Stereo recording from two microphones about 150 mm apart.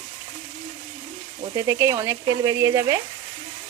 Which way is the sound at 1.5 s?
25° right (ahead or behind).